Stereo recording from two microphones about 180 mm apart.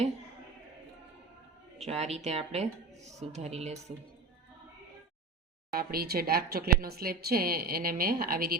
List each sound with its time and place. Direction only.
1.8 s speech: 35° right (ahead or behind)
5.7 s a woman's voice: 55° right (ahead or behind)